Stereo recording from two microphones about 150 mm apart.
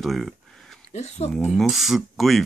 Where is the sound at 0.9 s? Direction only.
50° left (ahead or behind).